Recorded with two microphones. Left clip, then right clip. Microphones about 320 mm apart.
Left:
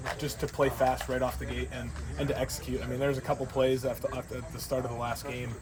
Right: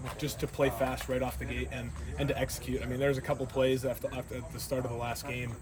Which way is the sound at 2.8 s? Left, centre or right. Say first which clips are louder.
Even; centre.